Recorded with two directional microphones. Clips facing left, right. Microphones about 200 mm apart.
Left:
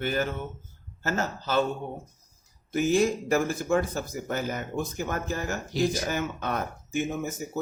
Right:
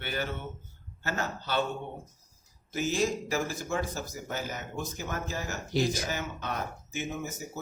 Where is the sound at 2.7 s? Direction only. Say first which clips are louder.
Left 6 dB; 55° left (ahead or behind).